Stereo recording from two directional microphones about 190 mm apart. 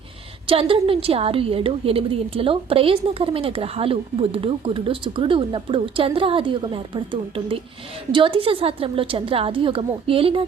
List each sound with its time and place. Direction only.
0.4 s a woman's voice: 30° right (ahead or behind)